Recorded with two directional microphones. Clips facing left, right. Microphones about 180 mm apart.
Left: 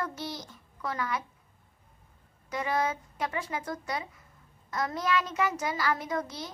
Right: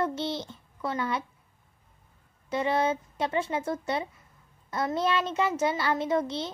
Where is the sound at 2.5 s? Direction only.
25° right (ahead or behind).